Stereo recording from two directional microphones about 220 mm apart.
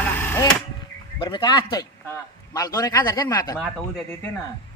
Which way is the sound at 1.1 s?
20° left (ahead or behind).